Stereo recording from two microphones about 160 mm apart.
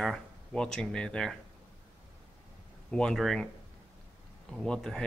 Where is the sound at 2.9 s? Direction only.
5° left (ahead or behind).